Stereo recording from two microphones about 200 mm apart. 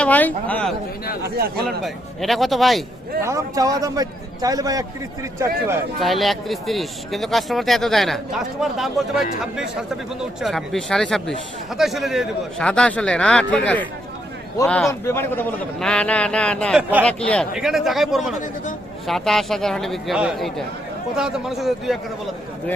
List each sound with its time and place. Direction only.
0.0 s speech: 10° left (ahead or behind)
1.2 s speech: 55° right (ahead or behind)
1.8 s speech: centre (ahead or behind)
3.2 s a man's voice: 15° right (ahead or behind)
6.0 s speech: centre (ahead or behind)
14.8 s speech: 10° left (ahead or behind)